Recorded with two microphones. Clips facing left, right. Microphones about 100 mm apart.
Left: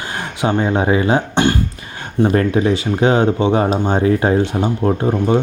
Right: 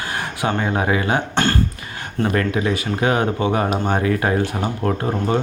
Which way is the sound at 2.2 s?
25° left (ahead or behind).